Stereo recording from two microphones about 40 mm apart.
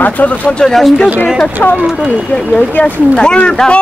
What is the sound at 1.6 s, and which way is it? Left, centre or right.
Speech, left.